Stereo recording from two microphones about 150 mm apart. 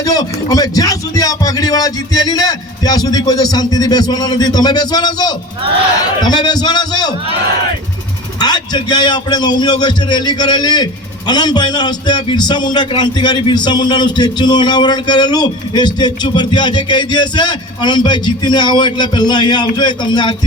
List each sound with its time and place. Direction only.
0.0 s a man's voice: 25° left (ahead or behind)
8.4 s a man's voice: 25° left (ahead or behind)